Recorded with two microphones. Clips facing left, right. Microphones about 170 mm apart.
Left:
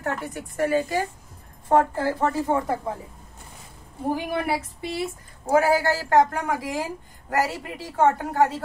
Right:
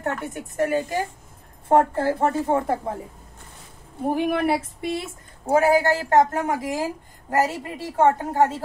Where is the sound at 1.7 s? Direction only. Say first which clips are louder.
Right 2 dB; 25° right (ahead or behind).